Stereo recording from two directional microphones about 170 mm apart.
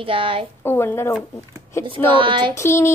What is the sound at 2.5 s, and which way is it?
Speech, 15° left (ahead or behind).